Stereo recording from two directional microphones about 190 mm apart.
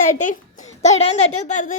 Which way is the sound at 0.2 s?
40° left (ahead or behind).